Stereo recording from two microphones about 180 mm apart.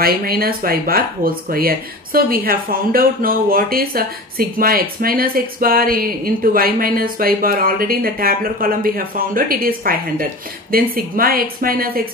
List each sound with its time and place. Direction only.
0.0 s speech: 55° right (ahead or behind)